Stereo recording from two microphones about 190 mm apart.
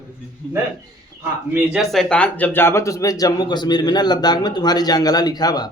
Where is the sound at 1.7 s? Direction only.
Centre (ahead or behind).